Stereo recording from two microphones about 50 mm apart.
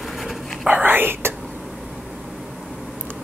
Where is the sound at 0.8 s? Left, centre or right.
Right.